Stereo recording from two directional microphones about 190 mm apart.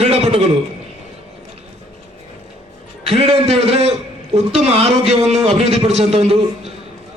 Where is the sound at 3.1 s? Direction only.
30° right (ahead or behind).